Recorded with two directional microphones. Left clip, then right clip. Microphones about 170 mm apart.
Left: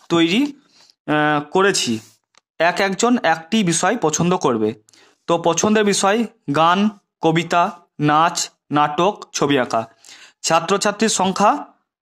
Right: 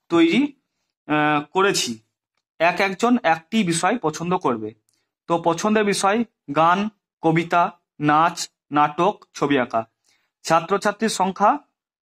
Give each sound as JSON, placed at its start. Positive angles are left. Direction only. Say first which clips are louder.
{"t": 0.1, "sound": "speech", "louder": "left 1 dB", "side_deg": 40}